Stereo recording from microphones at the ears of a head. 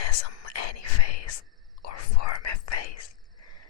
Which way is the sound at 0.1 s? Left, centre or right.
Left.